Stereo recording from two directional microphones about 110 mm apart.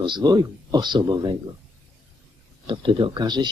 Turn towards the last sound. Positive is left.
turn(degrees=-40)  # may be behind; listen again after turning